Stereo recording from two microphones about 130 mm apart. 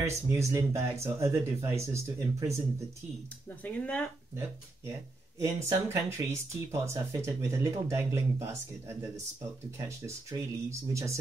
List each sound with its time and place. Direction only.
0.0 s speech: 20° right (ahead or behind)
3.4 s speech: 10° left (ahead or behind)
5.4 s speech: 25° right (ahead or behind)